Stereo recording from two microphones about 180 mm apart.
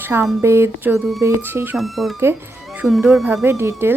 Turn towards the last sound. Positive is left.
turn(degrees=-15)  # may be behind; listen again after turning